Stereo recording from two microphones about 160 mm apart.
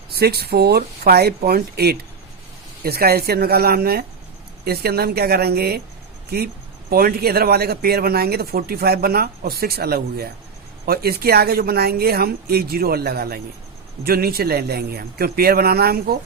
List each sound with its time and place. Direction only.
0.1 s speech: 80° right
6.9 s speech: 70° right (ahead or behind)